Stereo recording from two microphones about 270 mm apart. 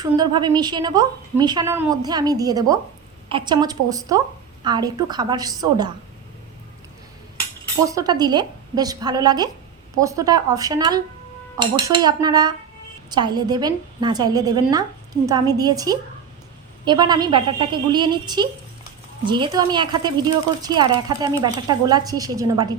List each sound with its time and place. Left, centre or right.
0.0 s a woman's voice: centre
7.9 s a woman's voice: centre